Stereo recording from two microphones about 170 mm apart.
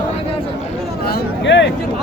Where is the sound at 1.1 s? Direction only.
80° left.